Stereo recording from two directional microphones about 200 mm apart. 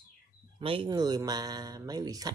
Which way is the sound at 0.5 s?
25° right (ahead or behind).